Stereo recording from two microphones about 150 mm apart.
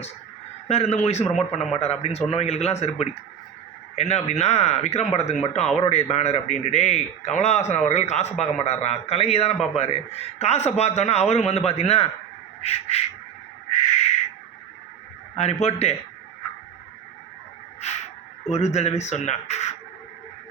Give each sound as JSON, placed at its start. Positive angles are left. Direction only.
{"t": 0.7, "sound": "a man's voice", "side_deg": 45}
{"t": 1.2, "sound": "speech", "side_deg": 5}
{"t": 1.5, "sound": "a man's voice", "side_deg": 45}
{"t": 15.4, "sound": "a man's voice", "side_deg": 45}
{"t": 18.5, "sound": "a man's voice", "side_deg": 50}